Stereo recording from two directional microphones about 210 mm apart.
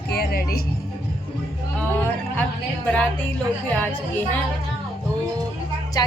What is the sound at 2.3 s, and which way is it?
A woman's voice, 10° left (ahead or behind).